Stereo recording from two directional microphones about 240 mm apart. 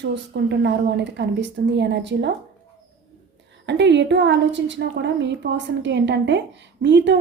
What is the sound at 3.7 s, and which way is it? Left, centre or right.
A woman's voice, right.